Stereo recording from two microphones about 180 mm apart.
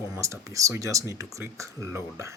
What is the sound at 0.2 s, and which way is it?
Speech, 15° right (ahead or behind).